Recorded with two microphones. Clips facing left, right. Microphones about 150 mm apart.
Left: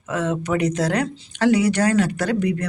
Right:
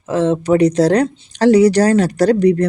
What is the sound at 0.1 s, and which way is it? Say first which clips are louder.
Speech: right 8 dB; 30° right (ahead or behind).